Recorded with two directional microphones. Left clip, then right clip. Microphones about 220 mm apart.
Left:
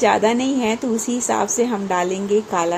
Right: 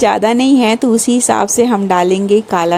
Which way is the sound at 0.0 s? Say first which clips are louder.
Right 5 dB; 45° right (ahead or behind).